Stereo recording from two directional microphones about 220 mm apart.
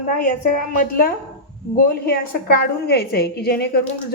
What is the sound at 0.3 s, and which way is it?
A woman's voice, 40° left (ahead or behind).